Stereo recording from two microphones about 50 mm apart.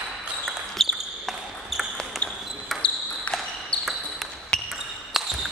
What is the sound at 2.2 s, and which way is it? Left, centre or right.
Basketball bounce, left.